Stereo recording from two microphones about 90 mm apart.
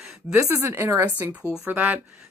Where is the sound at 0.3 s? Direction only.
30° right (ahead or behind).